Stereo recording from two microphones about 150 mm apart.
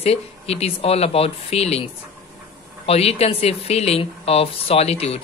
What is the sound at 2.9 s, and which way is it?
A woman's voice, 45° left (ahead or behind).